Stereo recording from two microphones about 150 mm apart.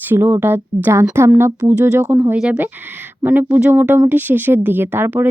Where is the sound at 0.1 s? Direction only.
15° right (ahead or behind).